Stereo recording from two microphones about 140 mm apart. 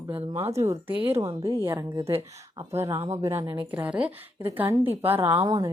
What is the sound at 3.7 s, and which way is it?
A woman's voice, 10° right (ahead or behind).